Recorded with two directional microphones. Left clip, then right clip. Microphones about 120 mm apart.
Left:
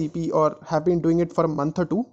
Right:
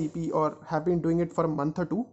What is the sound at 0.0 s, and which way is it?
Speech, 50° left (ahead or behind).